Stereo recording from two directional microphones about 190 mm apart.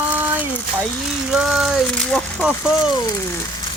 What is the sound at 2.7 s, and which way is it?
Speech, 20° left (ahead or behind).